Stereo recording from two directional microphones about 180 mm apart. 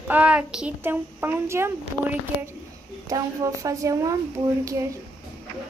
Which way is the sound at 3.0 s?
20° right (ahead or behind).